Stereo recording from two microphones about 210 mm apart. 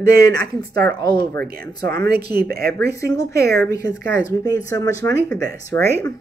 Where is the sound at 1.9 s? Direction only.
50° right (ahead or behind).